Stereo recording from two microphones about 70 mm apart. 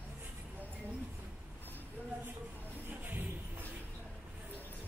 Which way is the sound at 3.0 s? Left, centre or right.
Right.